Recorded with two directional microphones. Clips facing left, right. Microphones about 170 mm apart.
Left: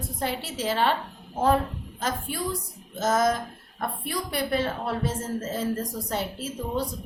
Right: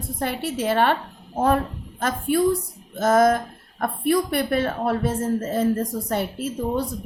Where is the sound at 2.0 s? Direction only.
60° right (ahead or behind).